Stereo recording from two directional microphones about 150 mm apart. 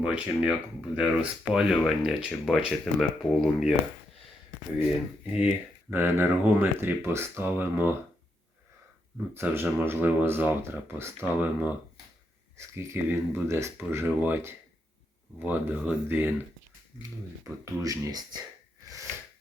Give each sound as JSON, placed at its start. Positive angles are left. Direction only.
{"t": 0.0, "sound": "speech", "side_deg": -5}
{"t": 5.2, "sound": "speech", "side_deg": -5}
{"t": 9.3, "sound": "speech", "side_deg": -15}
{"t": 17.4, "sound": "speech", "side_deg": -20}